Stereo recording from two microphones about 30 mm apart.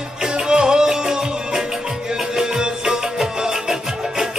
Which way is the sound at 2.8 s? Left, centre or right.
Centre.